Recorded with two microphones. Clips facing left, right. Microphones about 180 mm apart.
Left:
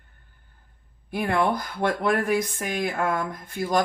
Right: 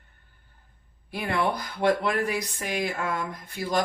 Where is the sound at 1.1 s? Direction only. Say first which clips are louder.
Left 3 dB; 50° left (ahead or behind).